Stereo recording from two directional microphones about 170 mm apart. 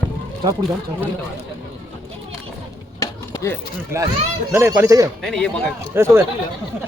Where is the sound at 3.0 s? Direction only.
15° left (ahead or behind).